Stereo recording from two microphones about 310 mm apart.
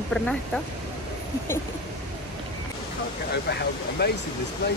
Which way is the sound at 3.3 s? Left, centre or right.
Left.